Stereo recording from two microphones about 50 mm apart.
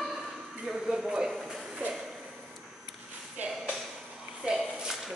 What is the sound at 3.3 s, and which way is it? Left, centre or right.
Shuffle, right.